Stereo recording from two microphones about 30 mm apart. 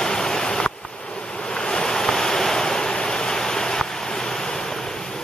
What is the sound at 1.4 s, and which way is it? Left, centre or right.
Waves, left.